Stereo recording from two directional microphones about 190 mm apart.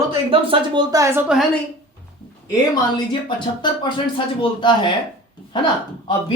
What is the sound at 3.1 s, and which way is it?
Speech, 25° left (ahead or behind).